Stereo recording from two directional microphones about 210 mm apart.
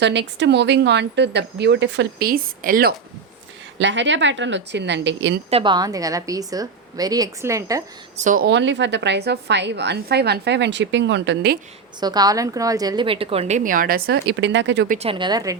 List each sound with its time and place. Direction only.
0.0 s a woman's voice: 60° right (ahead or behind); by 2.9 s 40° right (ahead or behind)
3.8 s a woman's voice: 60° right (ahead or behind)
5.5 s a woman's voice: 25° right (ahead or behind)
8.1 s speech: 35° right (ahead or behind)
8.4 s a woman's voice: 60° right (ahead or behind)
11.9 s a woman's voice: 20° right (ahead or behind); by 14.8 s 60° right (ahead or behind)
14.8 s a woman's voice: 30° right (ahead or behind)